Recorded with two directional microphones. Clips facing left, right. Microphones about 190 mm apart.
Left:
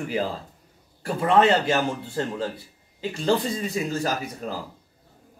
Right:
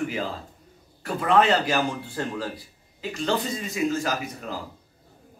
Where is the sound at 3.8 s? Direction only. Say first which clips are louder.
Right 3 dB; 35° left (ahead or behind).